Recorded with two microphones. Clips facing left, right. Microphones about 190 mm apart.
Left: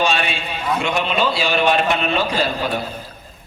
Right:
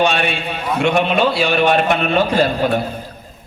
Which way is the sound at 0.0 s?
55° right (ahead or behind).